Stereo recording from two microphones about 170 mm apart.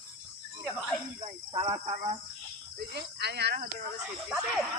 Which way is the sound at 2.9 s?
75° right (ahead or behind).